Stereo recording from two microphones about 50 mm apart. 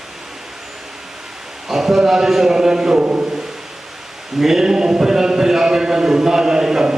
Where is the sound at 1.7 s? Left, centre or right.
Centre.